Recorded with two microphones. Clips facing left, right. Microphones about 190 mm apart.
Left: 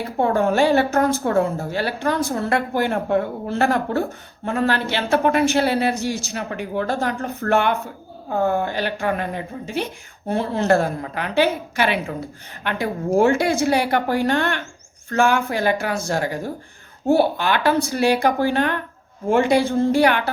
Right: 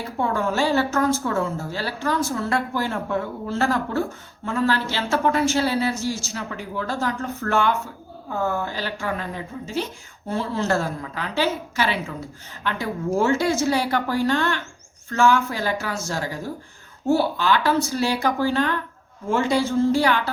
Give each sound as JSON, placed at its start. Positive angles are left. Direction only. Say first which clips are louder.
{"t": 0.2, "sound": "a woman's voice", "louder": "left 5 dB", "side_deg": 55}
{"t": 13.1, "sound": "a woman's voice", "louder": "left 4 dB", "side_deg": 55}